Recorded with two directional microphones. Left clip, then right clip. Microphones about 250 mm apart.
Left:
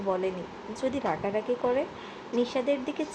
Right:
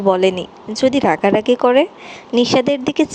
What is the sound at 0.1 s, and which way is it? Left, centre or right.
Speech, right.